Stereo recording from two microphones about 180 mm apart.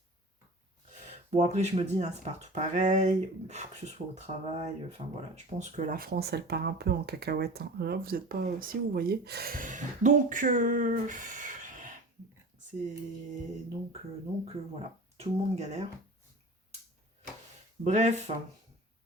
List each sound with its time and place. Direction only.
1.0 s speech: 40° right (ahead or behind)
15.2 s speech: 35° right (ahead or behind)
17.8 s speech: 40° right (ahead or behind)